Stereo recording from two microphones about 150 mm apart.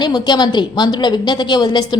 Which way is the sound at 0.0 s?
30° left (ahead or behind).